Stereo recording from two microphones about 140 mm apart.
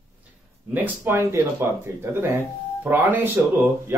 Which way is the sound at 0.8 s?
15° right (ahead or behind).